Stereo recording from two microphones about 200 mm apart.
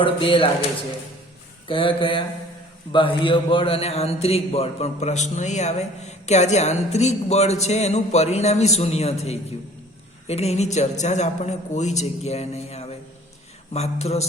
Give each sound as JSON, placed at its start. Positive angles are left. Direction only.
{"t": 0.0, "sound": "speech", "side_deg": 25}
{"t": 1.6, "sound": "a man's voice", "side_deg": 25}